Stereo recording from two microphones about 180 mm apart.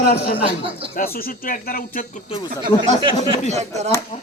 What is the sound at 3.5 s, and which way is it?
Speech, 40° right (ahead or behind).